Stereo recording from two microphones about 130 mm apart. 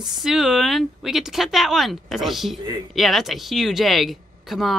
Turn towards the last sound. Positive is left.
turn(degrees=0)  # may be behind; listen again after turning